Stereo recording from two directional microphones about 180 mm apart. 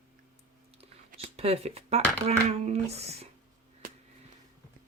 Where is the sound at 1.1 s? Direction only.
35° right (ahead or behind).